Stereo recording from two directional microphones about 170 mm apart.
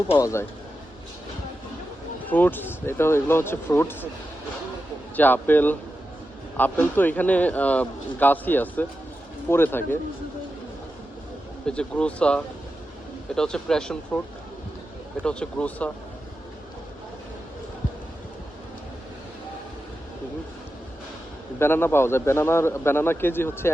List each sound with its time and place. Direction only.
0.1 s speech: 15° left (ahead or behind)
2.3 s speech: 10° left (ahead or behind)
5.1 s speech: 10° left (ahead or behind)
11.6 s speech: 5° left (ahead or behind)
15.2 s speech: 5° left (ahead or behind)
21.6 s speech: 15° left (ahead or behind)